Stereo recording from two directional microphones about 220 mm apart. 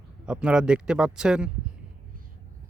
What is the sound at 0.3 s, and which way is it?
Speech, 5° right (ahead or behind).